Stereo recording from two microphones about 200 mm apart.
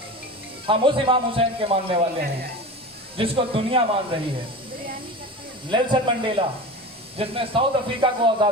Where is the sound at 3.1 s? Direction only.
25° right (ahead or behind).